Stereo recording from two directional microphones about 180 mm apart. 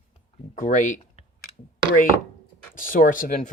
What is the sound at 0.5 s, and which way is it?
Speech, 45° left (ahead or behind).